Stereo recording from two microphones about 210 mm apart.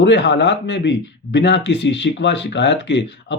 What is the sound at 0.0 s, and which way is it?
Speech, 55° left (ahead or behind).